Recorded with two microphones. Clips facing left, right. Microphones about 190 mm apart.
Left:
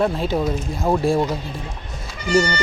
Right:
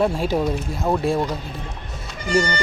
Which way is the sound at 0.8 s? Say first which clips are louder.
Left 2 dB; centre (ahead or behind).